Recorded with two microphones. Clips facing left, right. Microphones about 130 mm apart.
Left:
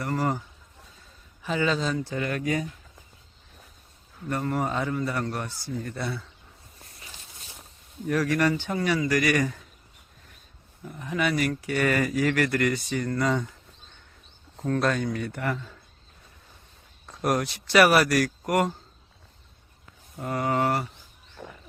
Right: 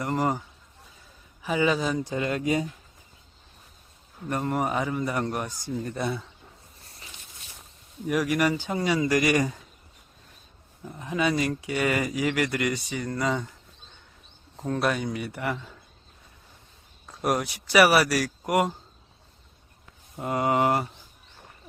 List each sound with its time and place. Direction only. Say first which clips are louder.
0.0 s speech: right 1 dB; 20° right (ahead or behind)
4.3 s speech: right 1 dB; 20° right (ahead or behind)
8.0 s speech: even; 10° right (ahead or behind)
10.8 s speech: right 1 dB; 20° right (ahead or behind)
14.5 s speech: left 1 dB; 15° right (ahead or behind)
17.2 s speech: left 1 dB; 10° right (ahead or behind)
20.1 s speech: right 2 dB; 20° right (ahead or behind)
21.4 s a sound: left 10 dB; 90° left